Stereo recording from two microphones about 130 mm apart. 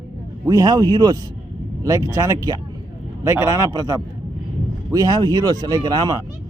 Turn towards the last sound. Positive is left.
turn(degrees=-30)  # may be behind; listen again after turning